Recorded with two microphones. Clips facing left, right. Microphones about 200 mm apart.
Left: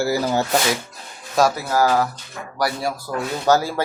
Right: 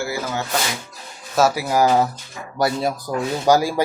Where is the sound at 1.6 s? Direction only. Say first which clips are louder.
Right 2 dB; 20° right (ahead or behind).